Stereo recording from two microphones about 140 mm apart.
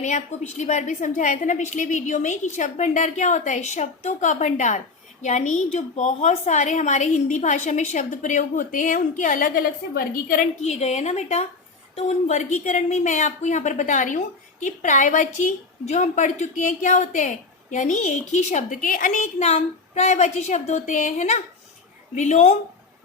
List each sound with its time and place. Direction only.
0.0 s a woman's voice: 60° left (ahead or behind); by 10.5 s 90° left
10.6 s a woman's voice: 50° left (ahead or behind)